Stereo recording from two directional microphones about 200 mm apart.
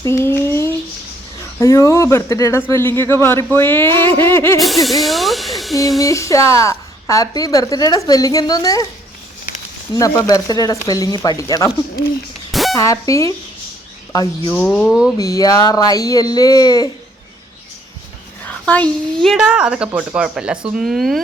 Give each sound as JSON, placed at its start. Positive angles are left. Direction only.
{"t": 0.0, "sound": "a sound", "side_deg": 15}
{"t": 1.5, "sound": "a woman's voice", "side_deg": 15}
{"t": 4.6, "sound": "a woman's voice", "side_deg": 0}
{"t": 6.0, "sound": "a woman's voice", "side_deg": 15}
{"t": 9.9, "sound": "speech", "side_deg": 20}
{"t": 12.5, "sound": "a sound", "side_deg": 0}
{"t": 12.7, "sound": "a woman's voice", "side_deg": 15}
{"t": 14.5, "sound": "a woman's voice", "side_deg": 5}
{"t": 15.2, "sound": "speech", "side_deg": 20}
{"t": 18.6, "sound": "a woman's voice", "side_deg": 5}